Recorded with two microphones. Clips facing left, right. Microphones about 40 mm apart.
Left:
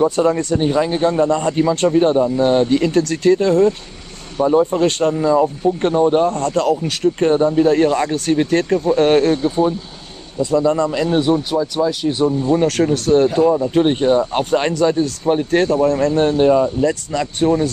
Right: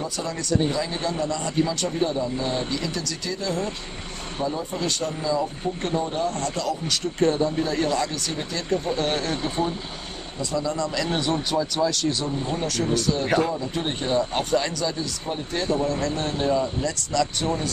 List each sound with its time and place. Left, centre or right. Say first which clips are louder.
0.0 s speech: left 14 dB; left
10.4 s speech: left 11 dB; left
11.5 s speech: left 5 dB; centre
12.5 s speech: left 9 dB; left
13.7 s speech: left 7 dB; left